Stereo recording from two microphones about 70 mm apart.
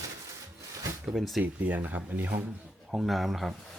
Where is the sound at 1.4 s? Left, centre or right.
Right.